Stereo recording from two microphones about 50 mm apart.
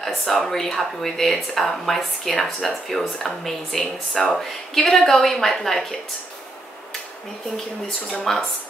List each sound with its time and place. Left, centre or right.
0.0 s speech: centre
8.1 s speech: centre